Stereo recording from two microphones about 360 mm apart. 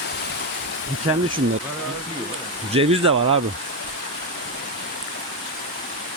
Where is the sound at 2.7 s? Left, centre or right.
Centre.